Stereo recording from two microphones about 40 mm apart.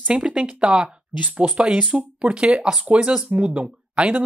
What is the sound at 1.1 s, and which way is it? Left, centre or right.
Speech, right.